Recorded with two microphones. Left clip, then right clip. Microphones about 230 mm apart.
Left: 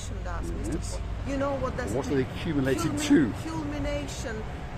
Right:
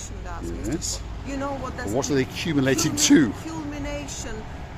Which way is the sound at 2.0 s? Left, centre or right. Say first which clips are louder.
Right 7 dB; right.